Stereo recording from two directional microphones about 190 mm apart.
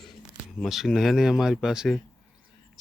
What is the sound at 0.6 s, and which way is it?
Speech, centre (ahead or behind).